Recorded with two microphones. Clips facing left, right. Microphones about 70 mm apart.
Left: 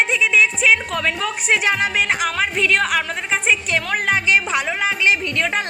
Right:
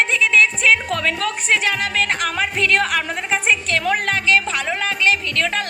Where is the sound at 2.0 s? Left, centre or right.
Centre.